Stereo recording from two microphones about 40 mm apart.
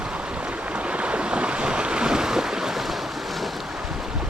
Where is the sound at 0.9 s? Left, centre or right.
Right; by 2.8 s centre.